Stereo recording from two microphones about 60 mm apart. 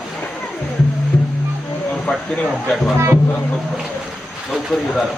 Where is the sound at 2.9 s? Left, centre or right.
Right.